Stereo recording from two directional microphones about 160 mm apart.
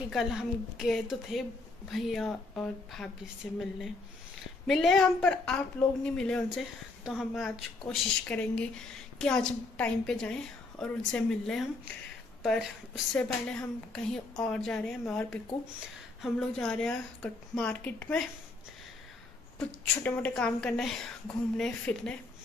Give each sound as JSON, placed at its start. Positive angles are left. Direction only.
{"t": 0.1, "sound": "a woman's voice", "side_deg": 0}
{"t": 20.0, "sound": "a woman's voice", "side_deg": 10}